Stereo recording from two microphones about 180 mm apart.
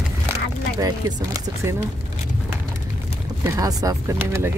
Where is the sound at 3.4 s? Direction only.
20° right (ahead or behind).